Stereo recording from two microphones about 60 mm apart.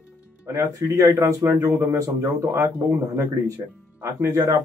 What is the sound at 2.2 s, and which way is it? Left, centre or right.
Speech, right.